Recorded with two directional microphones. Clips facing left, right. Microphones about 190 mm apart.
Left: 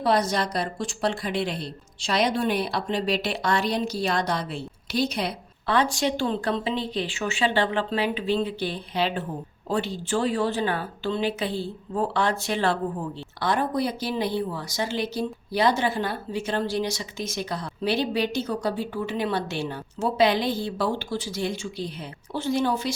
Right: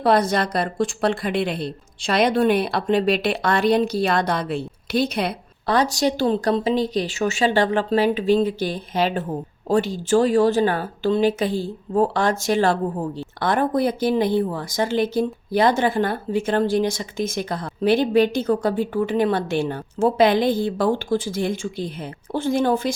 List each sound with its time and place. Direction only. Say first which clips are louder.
0.0 s a woman's voice: right 4 dB; 55° right (ahead or behind)
5.6 s speech: right 4 dB; 40° right (ahead or behind)